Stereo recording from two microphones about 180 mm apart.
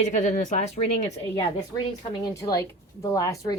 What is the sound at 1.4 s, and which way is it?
A woman's voice, 25° left (ahead or behind).